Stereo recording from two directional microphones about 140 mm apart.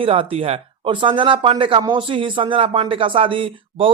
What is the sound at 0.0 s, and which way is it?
Speech, 40° right (ahead or behind).